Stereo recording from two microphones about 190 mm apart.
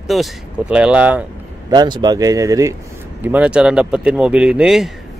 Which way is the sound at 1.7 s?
20° right (ahead or behind).